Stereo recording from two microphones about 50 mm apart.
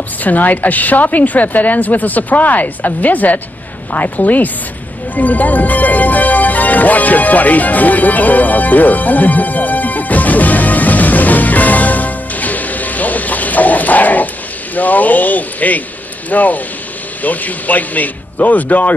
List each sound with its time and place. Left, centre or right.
0.2 s a woman's voice: left
5.1 s music: left
14.8 s a woman's voice: left